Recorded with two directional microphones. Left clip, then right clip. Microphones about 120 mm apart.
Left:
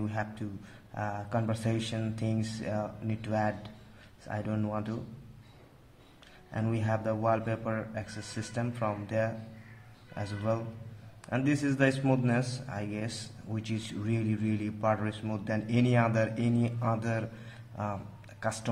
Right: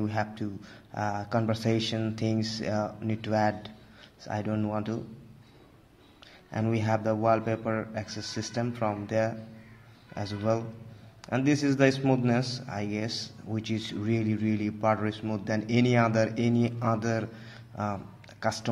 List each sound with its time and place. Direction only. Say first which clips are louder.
0.0 s a man's voice: right 5 dB; 25° right (ahead or behind)
4.4 s speech: right 3 dB; 15° right (ahead or behind)
6.5 s a man's voice: right 4 dB; 25° right (ahead or behind)